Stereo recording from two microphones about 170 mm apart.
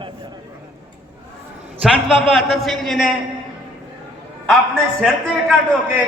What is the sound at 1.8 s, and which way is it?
A man's voice, centre (ahead or behind).